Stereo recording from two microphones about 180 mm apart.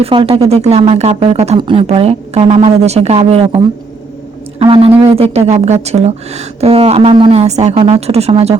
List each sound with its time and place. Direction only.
0.0 s speech: 30° right (ahead or behind)
4.6 s speech: 30° right (ahead or behind)